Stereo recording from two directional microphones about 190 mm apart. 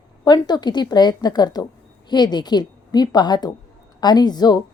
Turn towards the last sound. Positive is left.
turn(degrees=20)  # may be behind; listen again after turning